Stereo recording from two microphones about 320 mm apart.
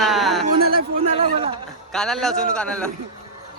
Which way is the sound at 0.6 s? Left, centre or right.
Right.